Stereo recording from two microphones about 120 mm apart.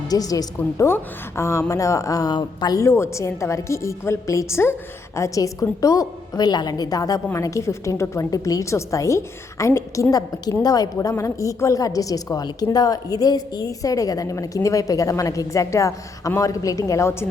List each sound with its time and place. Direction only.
0.1 s a woman's voice: 30° left (ahead or behind)